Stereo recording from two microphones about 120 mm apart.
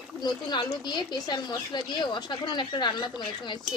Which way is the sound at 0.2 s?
35° left (ahead or behind).